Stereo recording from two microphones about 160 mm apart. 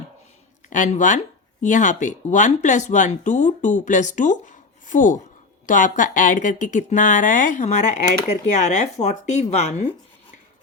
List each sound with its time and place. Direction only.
0.7 s speech: 50° left (ahead or behind)